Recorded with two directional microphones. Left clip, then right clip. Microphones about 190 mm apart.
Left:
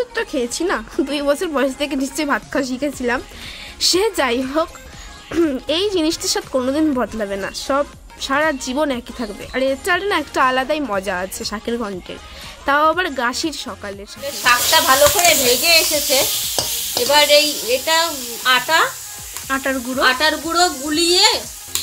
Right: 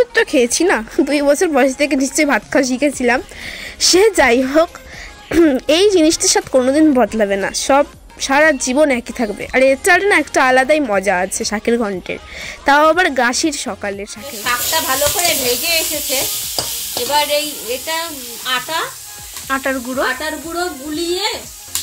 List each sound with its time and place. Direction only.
0.0 s speech: 30° right (ahead or behind)
14.2 s sizzle: centre (ahead or behind)